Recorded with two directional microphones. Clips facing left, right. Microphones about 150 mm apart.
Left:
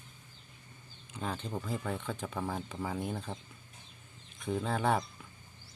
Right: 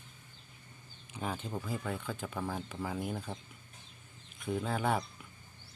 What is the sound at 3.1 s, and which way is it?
Speech, 5° left (ahead or behind).